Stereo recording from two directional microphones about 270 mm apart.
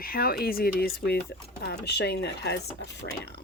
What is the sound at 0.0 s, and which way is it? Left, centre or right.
Speech, left.